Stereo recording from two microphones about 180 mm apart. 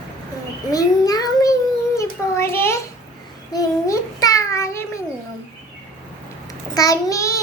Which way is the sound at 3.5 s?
20° left (ahead or behind).